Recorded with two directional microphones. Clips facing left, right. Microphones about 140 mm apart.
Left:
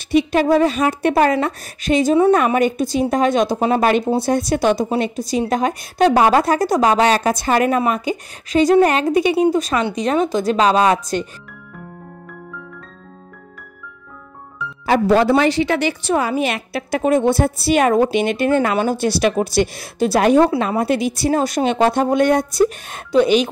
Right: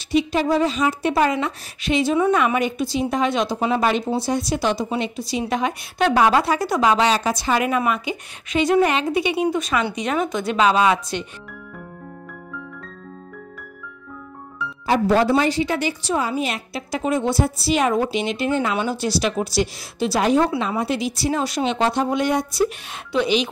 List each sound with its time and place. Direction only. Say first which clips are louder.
0.1 s a woman's voice: left 4 dB; 60° left (ahead or behind); by 11.2 s 40° left (ahead or behind)
14.9 s a woman's voice: left 3 dB; 80° left; by 23.5 s 45° left (ahead or behind)